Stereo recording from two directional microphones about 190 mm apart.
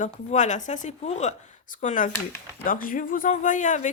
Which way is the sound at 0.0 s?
40° left (ahead or behind).